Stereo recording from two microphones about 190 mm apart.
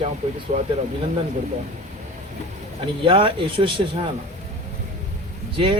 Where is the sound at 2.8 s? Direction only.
25° right (ahead or behind).